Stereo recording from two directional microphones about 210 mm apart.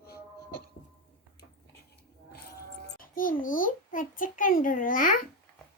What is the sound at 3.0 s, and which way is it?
A child's voice, 40° left (ahead or behind).